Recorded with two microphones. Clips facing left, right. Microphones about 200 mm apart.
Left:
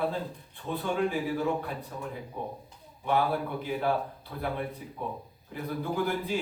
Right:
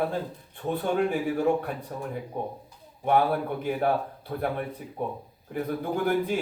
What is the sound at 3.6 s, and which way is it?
Speech, 50° right (ahead or behind).